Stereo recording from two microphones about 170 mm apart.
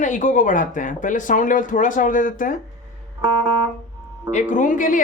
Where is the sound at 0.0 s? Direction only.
50° left (ahead or behind).